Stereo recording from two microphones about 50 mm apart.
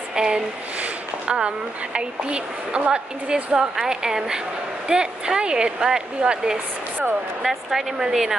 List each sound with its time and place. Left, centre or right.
0.1 s speech: centre
0.7 s a sound: right
2.0 s a woman's voice: right